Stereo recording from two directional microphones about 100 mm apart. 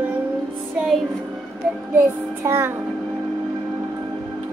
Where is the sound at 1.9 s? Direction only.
25° right (ahead or behind).